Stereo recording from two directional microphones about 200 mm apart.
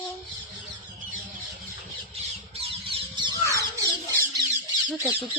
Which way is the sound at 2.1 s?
30° right (ahead or behind).